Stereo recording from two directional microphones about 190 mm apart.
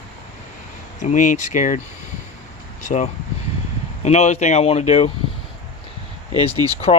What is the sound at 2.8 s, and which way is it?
Speech, 40° left (ahead or behind).